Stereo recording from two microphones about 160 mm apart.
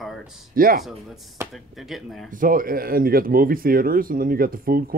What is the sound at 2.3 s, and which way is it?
Speech, 60° right (ahead or behind).